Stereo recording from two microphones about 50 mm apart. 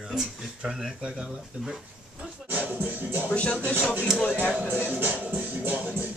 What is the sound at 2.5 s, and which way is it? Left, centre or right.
Music, right.